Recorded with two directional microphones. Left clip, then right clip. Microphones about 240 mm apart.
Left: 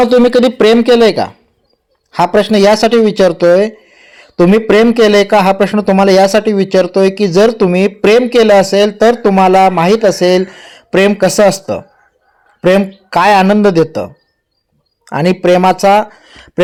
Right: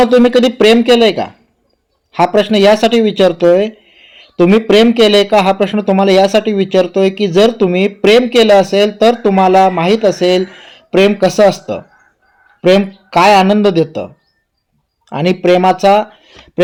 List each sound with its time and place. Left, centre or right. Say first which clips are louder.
0.0 s speech: left 1 dB; left
3.6 s a sound: left 3 dB; left
4.2 s speech: left 1 dB; left
5.0 s speech: left 1 dB; left
5.3 s speech: left 2 dB; left
6.9 s speech: left 2 dB; left
7.3 s speech: left 1 dB; left
10.2 s speech: left 2 dB; left
10.4 s speech: left 1 dB; left
15.3 s speech: left 1 dB; centre